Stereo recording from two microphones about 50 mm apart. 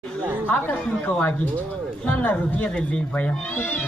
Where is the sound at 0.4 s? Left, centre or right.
Left.